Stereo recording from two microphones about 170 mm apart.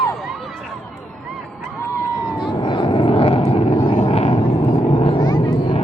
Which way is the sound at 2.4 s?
25° left (ahead or behind).